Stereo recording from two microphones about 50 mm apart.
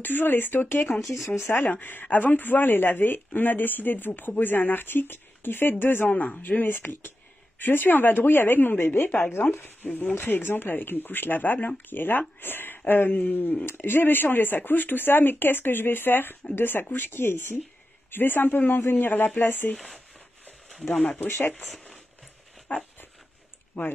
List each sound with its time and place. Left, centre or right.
0.0 s speech: left
0.9 s speech: centre
1.2 s speech: left
1.6 s speech: left
18.1 s speech: left
20.7 s speech: centre
21.2 s speech: left
22.7 s dog: left